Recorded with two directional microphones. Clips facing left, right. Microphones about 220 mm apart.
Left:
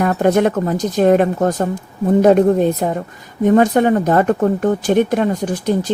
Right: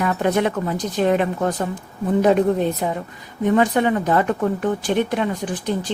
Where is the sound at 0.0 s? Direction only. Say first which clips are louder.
Left 5 dB; 45° left (ahead or behind).